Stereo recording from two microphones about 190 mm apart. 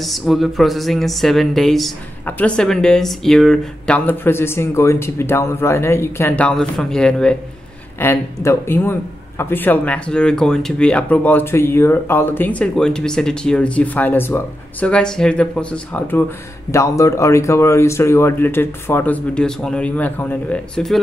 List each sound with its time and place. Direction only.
0.0 s speech: centre (ahead or behind)